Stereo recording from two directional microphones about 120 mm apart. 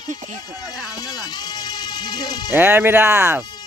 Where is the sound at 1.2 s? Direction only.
35° left (ahead or behind).